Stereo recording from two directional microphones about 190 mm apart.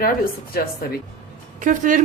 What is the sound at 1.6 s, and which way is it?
Speech, 40° right (ahead or behind).